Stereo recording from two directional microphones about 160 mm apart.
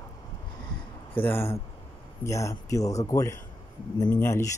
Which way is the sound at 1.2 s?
15° left (ahead or behind).